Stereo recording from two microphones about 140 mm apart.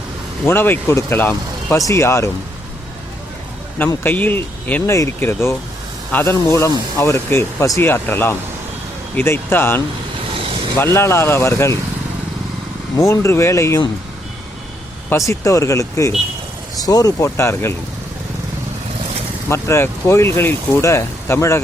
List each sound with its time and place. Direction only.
0.4 s speech: 15° left (ahead or behind)
3.8 s speech: 15° left (ahead or behind)
13.0 s speech: 20° left (ahead or behind)
15.1 s speech: 20° left (ahead or behind)
19.5 s speech: 20° left (ahead or behind)